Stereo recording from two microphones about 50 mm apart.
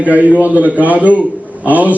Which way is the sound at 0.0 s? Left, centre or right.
Right.